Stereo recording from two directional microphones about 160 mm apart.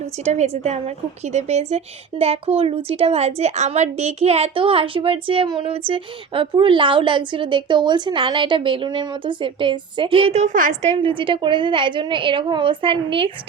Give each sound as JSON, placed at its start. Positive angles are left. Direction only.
{"t": 0.3, "sound": "a woman's voice", "side_deg": -45}